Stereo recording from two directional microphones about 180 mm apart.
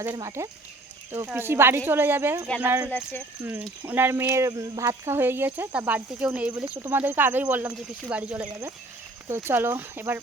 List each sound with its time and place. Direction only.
0.0 s speech: 15° right (ahead or behind)
2.9 s speech: 10° left (ahead or behind)
3.4 s speech: 10° right (ahead or behind)